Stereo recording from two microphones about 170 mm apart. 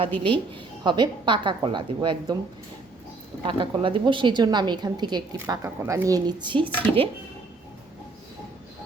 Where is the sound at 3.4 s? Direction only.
30° right (ahead or behind).